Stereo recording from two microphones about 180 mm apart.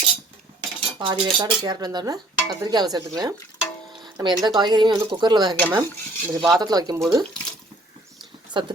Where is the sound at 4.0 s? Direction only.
25° right (ahead or behind).